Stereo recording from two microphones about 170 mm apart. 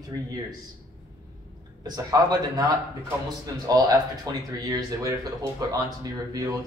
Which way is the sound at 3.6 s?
20° right (ahead or behind).